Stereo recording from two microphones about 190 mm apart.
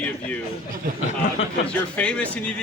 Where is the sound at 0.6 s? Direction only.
45° right (ahead or behind).